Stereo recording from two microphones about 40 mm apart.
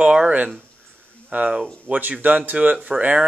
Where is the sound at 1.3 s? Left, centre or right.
Right.